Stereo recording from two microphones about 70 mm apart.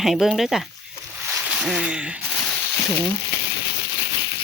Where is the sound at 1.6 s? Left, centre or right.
Centre.